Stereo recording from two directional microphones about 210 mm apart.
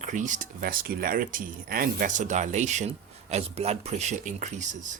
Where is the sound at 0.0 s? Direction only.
35° right (ahead or behind).